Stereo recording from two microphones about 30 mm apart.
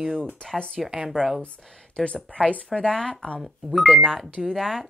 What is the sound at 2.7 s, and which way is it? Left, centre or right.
Speech, left.